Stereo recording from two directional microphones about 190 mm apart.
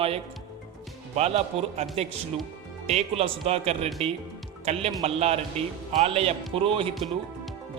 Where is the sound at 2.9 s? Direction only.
35° right (ahead or behind).